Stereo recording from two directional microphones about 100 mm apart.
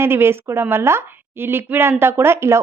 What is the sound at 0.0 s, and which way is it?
A woman's voice, 25° right (ahead or behind).